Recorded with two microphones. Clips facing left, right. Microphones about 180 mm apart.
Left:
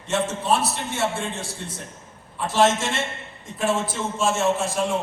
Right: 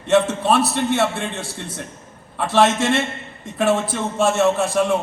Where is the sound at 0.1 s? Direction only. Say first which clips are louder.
Right 6 dB; 65° right (ahead or behind).